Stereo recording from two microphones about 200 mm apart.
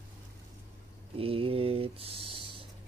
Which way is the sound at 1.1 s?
30° right (ahead or behind).